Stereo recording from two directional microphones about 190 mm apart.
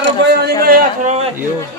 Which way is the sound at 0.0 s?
60° right (ahead or behind).